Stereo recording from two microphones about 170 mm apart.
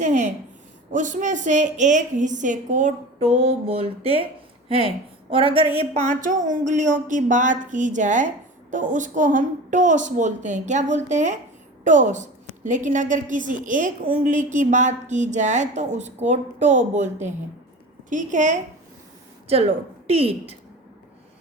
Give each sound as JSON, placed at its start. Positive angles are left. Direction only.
{"t": 0.0, "sound": "a woman's voice", "side_deg": -45}
{"t": 19.5, "sound": "a woman's voice", "side_deg": -35}